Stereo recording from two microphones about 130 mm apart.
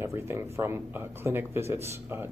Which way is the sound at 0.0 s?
20° right (ahead or behind).